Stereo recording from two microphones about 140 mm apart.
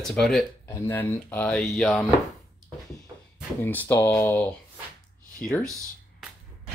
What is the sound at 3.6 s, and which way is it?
Speech, 15° left (ahead or behind).